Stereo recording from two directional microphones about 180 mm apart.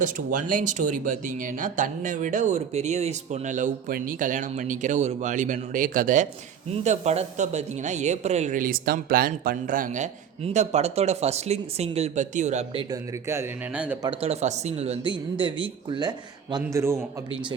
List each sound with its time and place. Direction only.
0.0 s speech: 50° right (ahead or behind)
12.9 s speech: 15° right (ahead or behind)
14.0 s a woman's voice: 30° right (ahead or behind)